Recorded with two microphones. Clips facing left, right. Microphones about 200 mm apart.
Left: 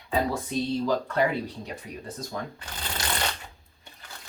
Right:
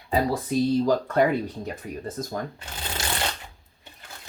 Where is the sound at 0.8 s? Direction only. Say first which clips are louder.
Right 4 dB; 45° right (ahead or behind).